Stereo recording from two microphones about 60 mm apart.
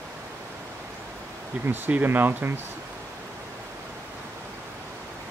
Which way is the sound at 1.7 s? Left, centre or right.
Right.